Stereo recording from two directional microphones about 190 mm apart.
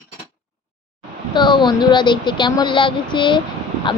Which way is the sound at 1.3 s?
25° left (ahead or behind).